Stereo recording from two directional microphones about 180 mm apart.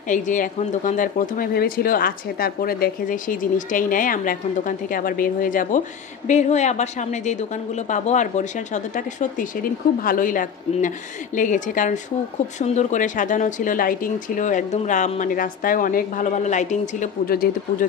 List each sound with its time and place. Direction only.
0.1 s speech: 45° left (ahead or behind)